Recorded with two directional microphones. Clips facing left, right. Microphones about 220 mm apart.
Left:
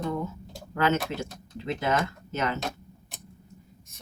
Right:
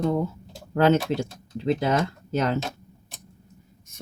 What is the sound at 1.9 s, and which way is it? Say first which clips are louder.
Speech: right 4 dB; 35° right (ahead or behind).